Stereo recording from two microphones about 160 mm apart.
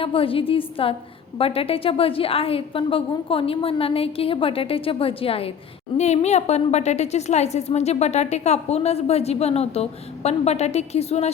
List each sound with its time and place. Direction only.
0.0 s a woman's voice: 35° left (ahead or behind)